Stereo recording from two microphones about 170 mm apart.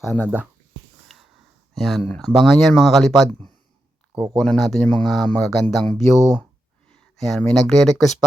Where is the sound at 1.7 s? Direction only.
Centre (ahead or behind).